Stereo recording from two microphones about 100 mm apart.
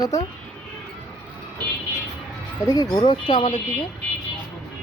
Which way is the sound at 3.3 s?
45° left (ahead or behind).